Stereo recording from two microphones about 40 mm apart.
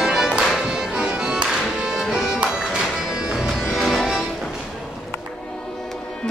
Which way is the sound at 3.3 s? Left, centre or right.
Centre.